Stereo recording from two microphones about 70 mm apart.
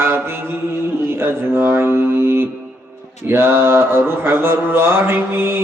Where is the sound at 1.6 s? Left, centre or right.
Right.